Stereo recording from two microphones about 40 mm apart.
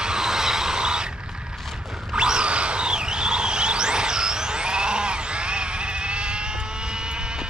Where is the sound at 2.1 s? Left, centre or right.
Right.